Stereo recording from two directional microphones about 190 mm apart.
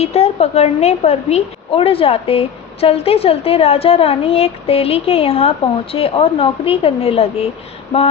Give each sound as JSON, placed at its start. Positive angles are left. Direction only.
{"t": 0.0, "sound": "a woman's voice", "side_deg": 30}